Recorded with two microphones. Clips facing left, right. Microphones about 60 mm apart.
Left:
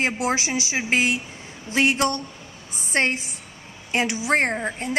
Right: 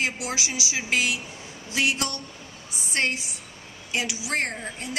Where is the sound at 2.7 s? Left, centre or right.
Left.